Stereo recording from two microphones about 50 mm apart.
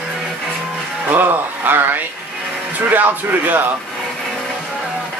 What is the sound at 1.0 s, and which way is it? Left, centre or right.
A man's voice, right.